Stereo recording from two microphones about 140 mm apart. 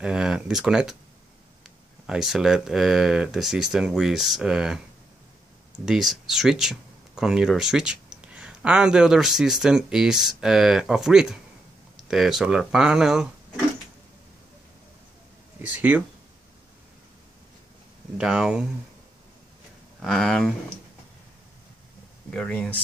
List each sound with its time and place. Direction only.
0.0 s speech: 5° right (ahead or behind)
5.9 s speech: 5° right (ahead or behind)
18.1 s speech: 5° right (ahead or behind)
20.0 s speech: 5° left (ahead or behind)
22.3 s speech: 5° left (ahead or behind)